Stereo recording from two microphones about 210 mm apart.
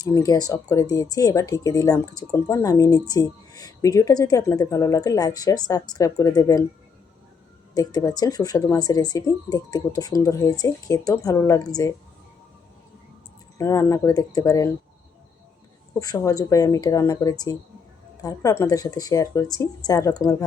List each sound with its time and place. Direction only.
0.0 s speech: 15° left (ahead or behind)
7.7 s speech: 20° left (ahead or behind)
13.6 s speech: 15° left (ahead or behind)
16.0 s speech: 15° left (ahead or behind)